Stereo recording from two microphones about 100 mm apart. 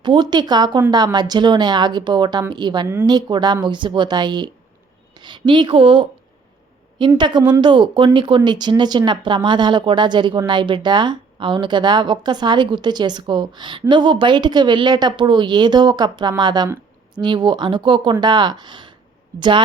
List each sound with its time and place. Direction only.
0.0 s a woman's voice: 45° right (ahead or behind)
2.8 s a woman's voice: 20° right (ahead or behind)
3.1 s a woman's voice: 45° right (ahead or behind)
7.2 s a woman's voice: 50° right (ahead or behind)